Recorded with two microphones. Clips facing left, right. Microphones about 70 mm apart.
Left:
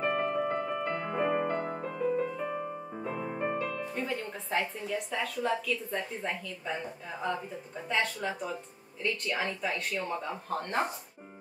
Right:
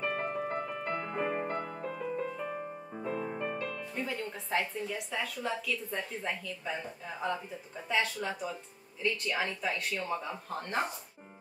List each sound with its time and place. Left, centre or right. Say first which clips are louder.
0.0 s piano: left 4 dB; centre
0.5 s music: left 4 dB; centre
0.8 s music: left 3 dB; centre
1.4 s music: left 4 dB; left
1.9 s music: left 7 dB; centre
3.3 s music: left 4 dB; left
3.7 s speech: left 3 dB; centre